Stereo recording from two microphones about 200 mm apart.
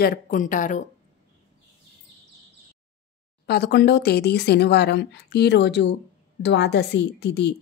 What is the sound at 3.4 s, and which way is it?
Speech, 55° left (ahead or behind).